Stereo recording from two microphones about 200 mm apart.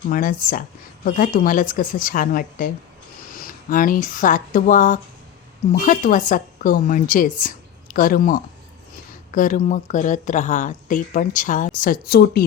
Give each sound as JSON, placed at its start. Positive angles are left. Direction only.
{"t": 0.1, "sound": "a woman's voice", "side_deg": 45}